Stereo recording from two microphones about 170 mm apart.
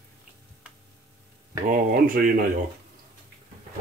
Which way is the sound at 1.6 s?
50° right (ahead or behind).